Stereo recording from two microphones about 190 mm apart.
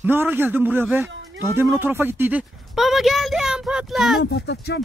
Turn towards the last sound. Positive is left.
turn(degrees=65)  # may be behind; listen again after turning